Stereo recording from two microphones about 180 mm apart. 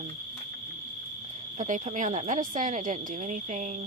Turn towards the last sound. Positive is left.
turn(degrees=-40)  # may be behind; listen again after turning